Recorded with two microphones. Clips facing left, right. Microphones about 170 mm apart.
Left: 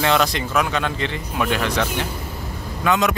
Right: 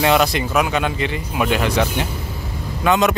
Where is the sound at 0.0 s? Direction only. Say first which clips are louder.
Right 3 dB; 10° right (ahead or behind).